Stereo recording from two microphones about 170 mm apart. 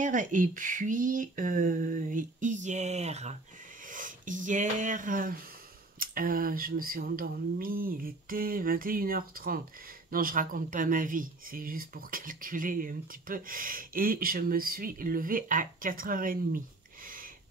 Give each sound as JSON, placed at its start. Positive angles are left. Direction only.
{"t": 0.0, "sound": "speech", "side_deg": -50}
{"t": 3.9, "sound": "speech", "side_deg": -50}